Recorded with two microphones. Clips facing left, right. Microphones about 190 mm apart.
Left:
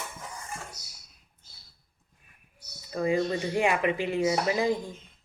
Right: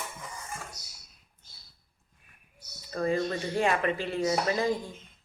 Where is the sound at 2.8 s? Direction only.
10° left (ahead or behind).